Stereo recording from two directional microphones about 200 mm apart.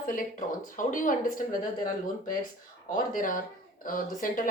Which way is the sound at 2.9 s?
45° left (ahead or behind).